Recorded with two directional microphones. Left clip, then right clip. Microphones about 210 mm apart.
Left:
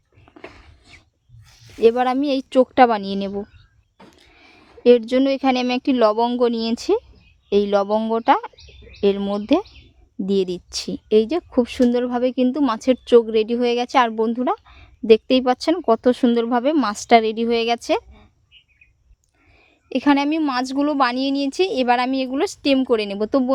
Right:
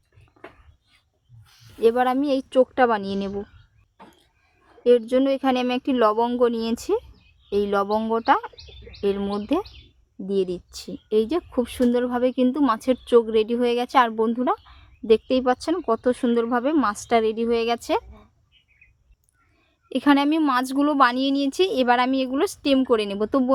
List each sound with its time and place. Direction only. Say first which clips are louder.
0.3 s whispering: left 13 dB; 40° left (ahead or behind)
1.8 s a woman's voice: left 3 dB; 25° left (ahead or behind)
19.9 s a woman's voice: left 1 dB; 10° left (ahead or behind)